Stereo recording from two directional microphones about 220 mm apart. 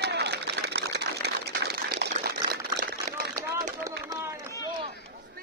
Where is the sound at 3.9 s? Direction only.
15° right (ahead or behind).